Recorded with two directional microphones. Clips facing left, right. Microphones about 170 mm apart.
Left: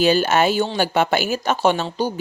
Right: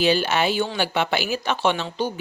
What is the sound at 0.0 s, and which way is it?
Speech, 45° left (ahead or behind).